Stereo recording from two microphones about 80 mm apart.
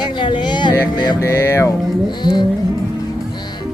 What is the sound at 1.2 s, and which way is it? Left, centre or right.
Speech, left.